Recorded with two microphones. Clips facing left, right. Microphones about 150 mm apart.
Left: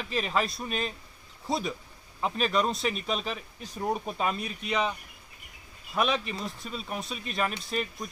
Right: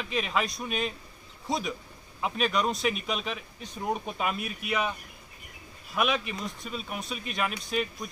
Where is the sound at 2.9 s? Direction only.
35° left (ahead or behind).